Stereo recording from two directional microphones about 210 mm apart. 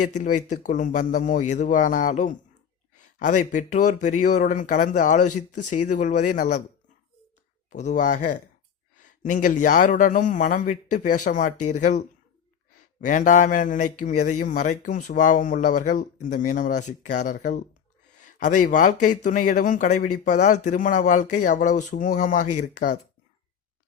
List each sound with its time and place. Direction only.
0.0 s speech: 35° left (ahead or behind)
7.7 s speech: 35° left (ahead or behind)